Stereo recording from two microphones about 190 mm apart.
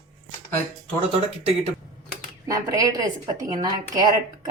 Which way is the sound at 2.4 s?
20° right (ahead or behind).